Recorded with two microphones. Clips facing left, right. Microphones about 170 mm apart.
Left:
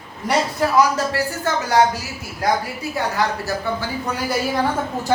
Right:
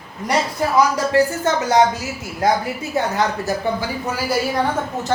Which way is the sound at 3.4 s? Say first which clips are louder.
Right 3 dB; 10° right (ahead or behind).